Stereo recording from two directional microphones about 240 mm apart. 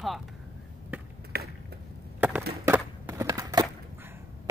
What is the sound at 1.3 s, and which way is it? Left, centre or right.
Chop, right.